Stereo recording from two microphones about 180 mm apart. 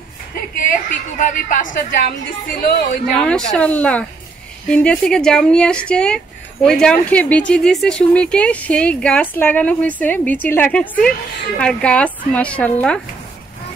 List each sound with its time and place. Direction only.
0.7 s a woman's voice: 45° left (ahead or behind)
2.6 s a woman's voice: 60° left (ahead or behind)
3.2 s speech: 5° left (ahead or behind)